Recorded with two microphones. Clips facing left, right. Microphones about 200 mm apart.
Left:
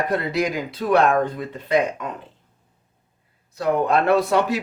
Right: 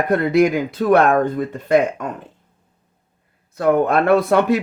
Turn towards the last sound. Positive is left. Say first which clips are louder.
# right 4 dB
turn(degrees=-55)  # may be behind; listen again after turning